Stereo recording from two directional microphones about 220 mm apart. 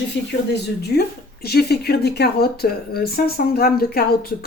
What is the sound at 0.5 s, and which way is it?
Speech, 45° left (ahead or behind).